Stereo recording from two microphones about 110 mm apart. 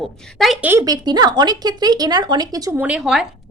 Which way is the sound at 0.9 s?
40° right (ahead or behind).